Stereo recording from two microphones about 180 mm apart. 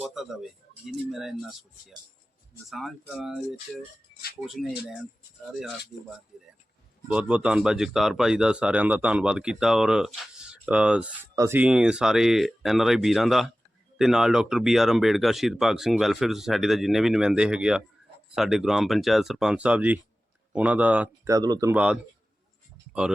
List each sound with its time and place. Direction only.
0.0 s speech: centre (ahead or behind)
2.6 s speech: centre (ahead or behind)
21.3 s speech: 20° right (ahead or behind)
22.9 s speech: 5° right (ahead or behind)